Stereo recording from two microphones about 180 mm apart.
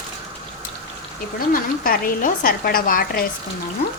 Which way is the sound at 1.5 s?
55° left (ahead or behind).